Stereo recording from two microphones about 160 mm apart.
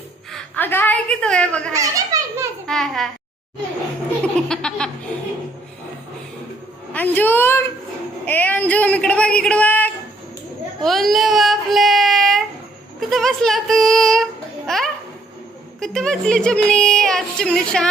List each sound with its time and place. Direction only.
0.3 s a woman's voice: 5° left (ahead or behind)
1.7 s children playing: 20° right (ahead or behind)
2.6 s speech: centre (ahead or behind)
4.2 s speech: 5° left (ahead or behind)
6.9 s a man's voice: 10° left (ahead or behind)
10.8 s child singing: centre (ahead or behind)
13.0 s speech: centre (ahead or behind)